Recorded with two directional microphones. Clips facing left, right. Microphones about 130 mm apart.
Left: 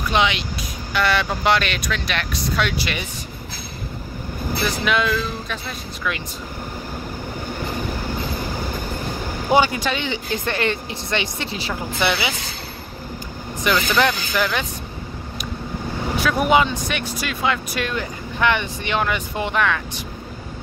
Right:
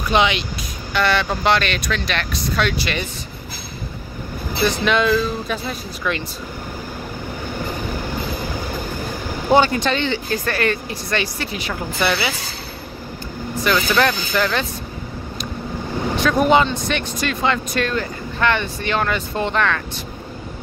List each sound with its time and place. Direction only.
0.1 s speech: centre (ahead or behind)
4.6 s speech: 5° left (ahead or behind)
9.5 s speech: 10° left (ahead or behind)
13.9 s speech: 15° left (ahead or behind)
16.2 s speech: 10° left (ahead or behind)